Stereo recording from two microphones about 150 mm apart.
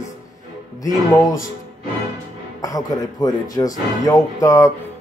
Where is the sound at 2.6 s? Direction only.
25° left (ahead or behind).